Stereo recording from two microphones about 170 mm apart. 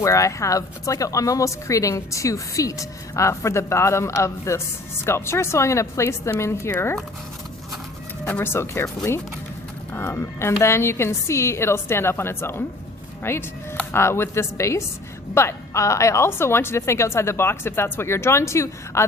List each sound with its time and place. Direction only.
0.0 s speech: 20° left (ahead or behind)
8.2 s speech: 10° left (ahead or behind)